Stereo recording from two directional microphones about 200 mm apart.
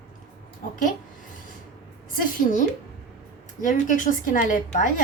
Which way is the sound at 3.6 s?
40° left (ahead or behind).